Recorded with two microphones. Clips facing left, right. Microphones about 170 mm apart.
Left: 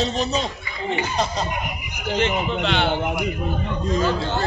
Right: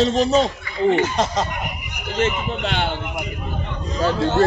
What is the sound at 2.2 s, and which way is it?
Speech, 45° right (ahead or behind).